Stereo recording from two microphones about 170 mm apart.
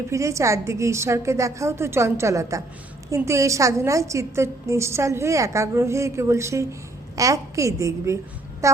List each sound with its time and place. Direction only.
0.1 s a woman's voice: 15° right (ahead or behind)